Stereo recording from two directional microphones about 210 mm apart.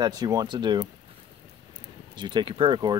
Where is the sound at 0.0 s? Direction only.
20° right (ahead or behind).